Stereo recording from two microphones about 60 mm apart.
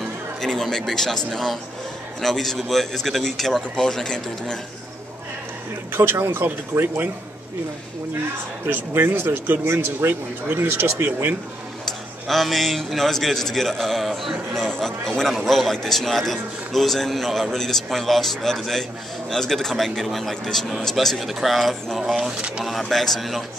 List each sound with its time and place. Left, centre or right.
0.4 s a man's voice: centre
5.9 s speech: right
8.6 s speech: right
11.8 s a man's voice: centre